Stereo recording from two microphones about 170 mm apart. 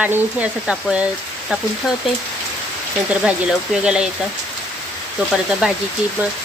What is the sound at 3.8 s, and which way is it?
Speech, 5° right (ahead or behind).